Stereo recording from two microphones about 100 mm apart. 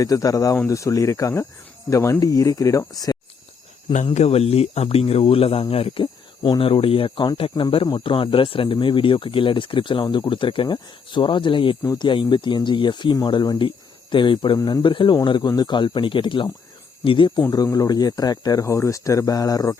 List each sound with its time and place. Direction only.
0.0 s speech: 35° left (ahead or behind)
3.8 s speech: 75° left (ahead or behind)
6.0 s speech: 50° left (ahead or behind)
7.9 s speech: 55° left (ahead or behind)
17.5 s speech: 35° left (ahead or behind)